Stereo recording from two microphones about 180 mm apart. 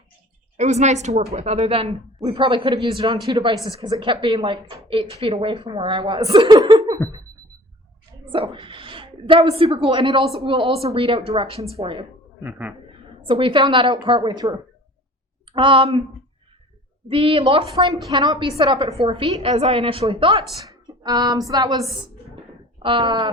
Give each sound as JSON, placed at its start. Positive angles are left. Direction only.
{"t": 0.5, "sound": "a woman's voice", "side_deg": -40}
{"t": 8.3, "sound": "a woman's voice", "side_deg": -30}
{"t": 12.4, "sound": "a man's voice", "side_deg": -10}
{"t": 13.2, "sound": "a woman's voice", "side_deg": -30}
{"t": 15.5, "sound": "a woman's voice", "side_deg": -30}
{"t": 17.1, "sound": "a woman's voice", "side_deg": -30}